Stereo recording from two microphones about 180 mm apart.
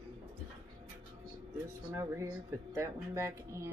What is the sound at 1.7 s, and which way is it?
Speech, 15° right (ahead or behind).